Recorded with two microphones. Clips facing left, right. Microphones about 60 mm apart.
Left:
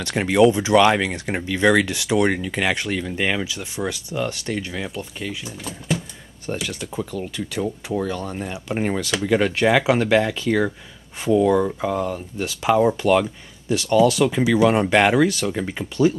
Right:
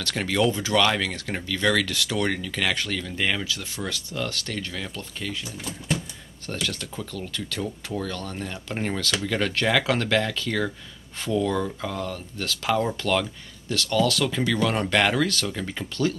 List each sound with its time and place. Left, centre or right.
0.0 s speech: left; by 6.0 s centre
6.4 s speech: centre